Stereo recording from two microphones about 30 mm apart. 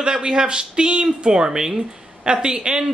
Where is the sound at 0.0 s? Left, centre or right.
Right.